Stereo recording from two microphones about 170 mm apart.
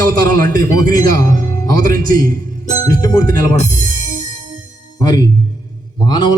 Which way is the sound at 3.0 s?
20° left (ahead or behind).